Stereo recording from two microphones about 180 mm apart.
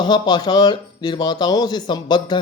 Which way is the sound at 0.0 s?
25° left (ahead or behind).